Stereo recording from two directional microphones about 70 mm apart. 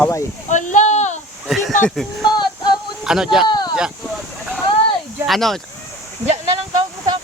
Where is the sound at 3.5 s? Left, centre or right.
Left.